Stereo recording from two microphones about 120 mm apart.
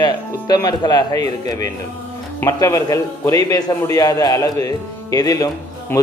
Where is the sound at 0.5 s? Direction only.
35° left (ahead or behind).